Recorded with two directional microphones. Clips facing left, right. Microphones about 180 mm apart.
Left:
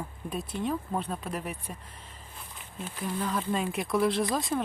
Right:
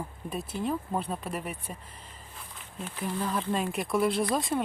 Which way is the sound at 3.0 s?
5° right (ahead or behind).